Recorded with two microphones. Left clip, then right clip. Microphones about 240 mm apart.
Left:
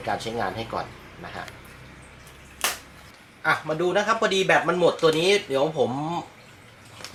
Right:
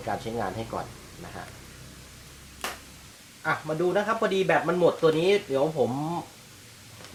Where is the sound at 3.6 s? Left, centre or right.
Centre.